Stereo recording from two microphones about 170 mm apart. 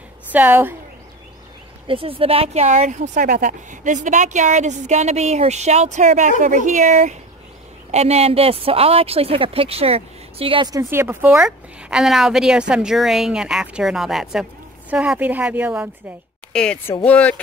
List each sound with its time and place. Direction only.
0.3 s a woman's voice: 10° right (ahead or behind)
1.9 s a woman's voice: 30° right (ahead or behind); by 15.9 s 10° right (ahead or behind)
16.5 s speech: 5° left (ahead or behind)